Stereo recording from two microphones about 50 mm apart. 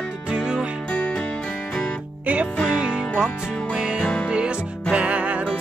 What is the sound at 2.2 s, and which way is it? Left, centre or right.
Music, right.